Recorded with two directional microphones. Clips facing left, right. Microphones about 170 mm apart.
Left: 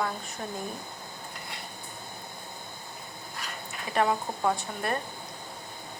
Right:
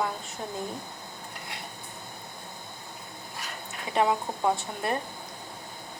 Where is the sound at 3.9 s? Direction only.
20° right (ahead or behind).